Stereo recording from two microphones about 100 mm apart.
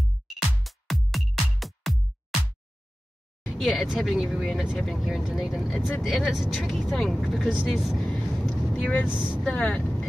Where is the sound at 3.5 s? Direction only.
5° left (ahead or behind).